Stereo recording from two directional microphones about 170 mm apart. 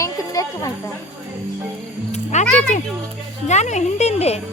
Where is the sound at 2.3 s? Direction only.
45° left (ahead or behind).